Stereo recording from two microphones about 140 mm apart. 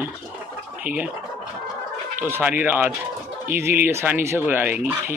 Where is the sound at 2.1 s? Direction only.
15° right (ahead or behind).